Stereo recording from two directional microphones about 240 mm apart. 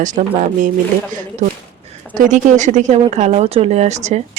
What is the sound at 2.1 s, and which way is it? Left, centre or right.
Speech, right.